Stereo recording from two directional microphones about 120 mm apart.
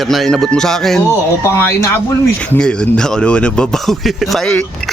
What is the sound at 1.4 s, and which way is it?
Speech, 25° left (ahead or behind).